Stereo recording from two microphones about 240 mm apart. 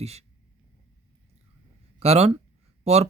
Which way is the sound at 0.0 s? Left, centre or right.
Right.